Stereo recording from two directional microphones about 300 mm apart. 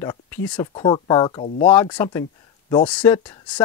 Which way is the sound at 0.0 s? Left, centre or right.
Centre.